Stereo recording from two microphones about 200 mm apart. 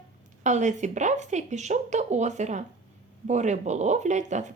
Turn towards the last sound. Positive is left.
turn(degrees=-35)  # may be behind; listen again after turning